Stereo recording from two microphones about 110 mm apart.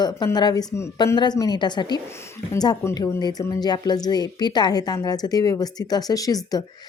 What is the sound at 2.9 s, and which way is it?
A woman's voice, 35° left (ahead or behind).